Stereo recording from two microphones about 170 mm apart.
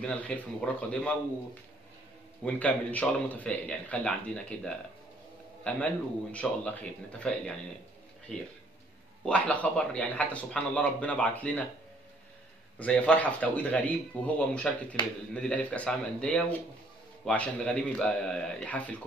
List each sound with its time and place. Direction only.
0.0 s speech: 5° left (ahead or behind)
2.4 s a man's voice: 10° left (ahead or behind)
9.2 s speech: 5° left (ahead or behind)
12.7 s speech: 10° left (ahead or behind)